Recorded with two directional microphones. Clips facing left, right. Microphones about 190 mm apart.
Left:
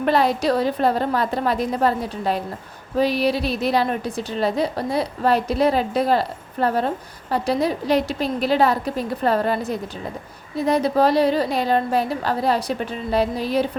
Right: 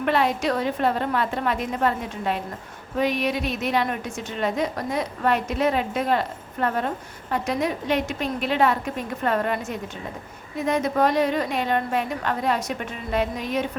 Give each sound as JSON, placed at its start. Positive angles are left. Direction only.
{"t": 0.0, "sound": "a woman's voice", "side_deg": 35}